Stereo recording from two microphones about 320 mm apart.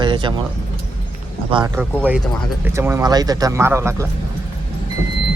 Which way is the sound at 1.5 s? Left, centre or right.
Centre.